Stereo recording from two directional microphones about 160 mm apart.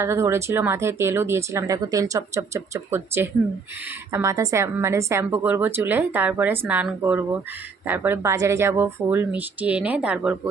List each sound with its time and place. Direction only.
0.0 s speech: 15° right (ahead or behind)